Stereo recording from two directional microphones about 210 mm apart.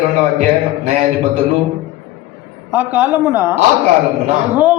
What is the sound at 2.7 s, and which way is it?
A man's voice, 10° right (ahead or behind).